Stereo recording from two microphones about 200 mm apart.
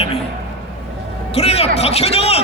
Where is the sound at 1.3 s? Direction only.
30° left (ahead or behind).